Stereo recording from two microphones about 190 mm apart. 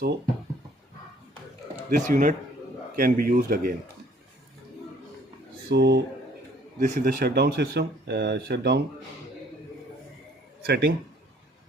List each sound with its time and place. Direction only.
1.9 s speech: 45° right (ahead or behind)
5.6 s speech: 60° right (ahead or behind)
6.7 s speech: 40° right (ahead or behind); by 8.8 s 60° right (ahead or behind)
10.6 s speech: 55° right (ahead or behind)